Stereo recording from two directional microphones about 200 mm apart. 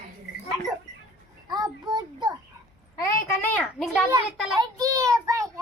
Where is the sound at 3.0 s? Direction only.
10° left (ahead or behind).